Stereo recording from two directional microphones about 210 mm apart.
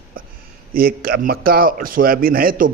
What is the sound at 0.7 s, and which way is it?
A man's voice, 45° right (ahead or behind).